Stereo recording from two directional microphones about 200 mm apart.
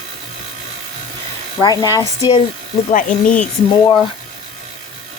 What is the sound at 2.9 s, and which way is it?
Speech, 40° left (ahead or behind).